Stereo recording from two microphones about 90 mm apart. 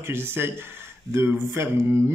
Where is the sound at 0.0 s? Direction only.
25° right (ahead or behind).